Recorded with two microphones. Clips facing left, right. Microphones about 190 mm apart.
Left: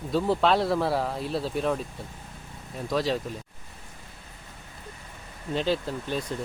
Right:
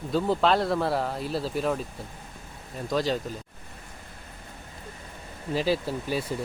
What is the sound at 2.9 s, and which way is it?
Speech, centre (ahead or behind).